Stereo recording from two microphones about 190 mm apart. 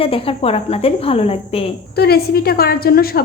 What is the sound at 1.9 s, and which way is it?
A woman's voice, 55° left (ahead or behind).